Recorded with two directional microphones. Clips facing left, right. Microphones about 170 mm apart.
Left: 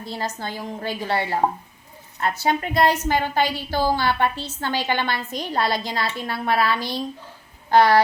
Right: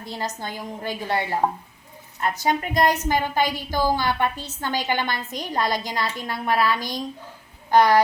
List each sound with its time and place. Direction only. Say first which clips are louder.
0.0 s a woman's voice: left 1 dB; 15° right (ahead or behind)